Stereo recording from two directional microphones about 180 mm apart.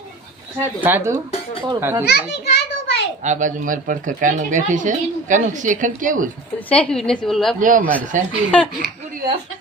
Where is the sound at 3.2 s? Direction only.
45° right (ahead or behind).